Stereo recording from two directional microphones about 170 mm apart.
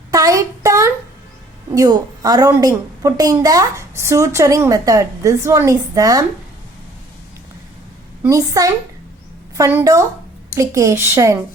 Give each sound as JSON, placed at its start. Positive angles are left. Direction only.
{"t": 0.1, "sound": "a sound", "side_deg": -20}
{"t": 1.7, "sound": "a woman's voice", "side_deg": -20}
{"t": 8.3, "sound": "a woman's voice", "side_deg": -20}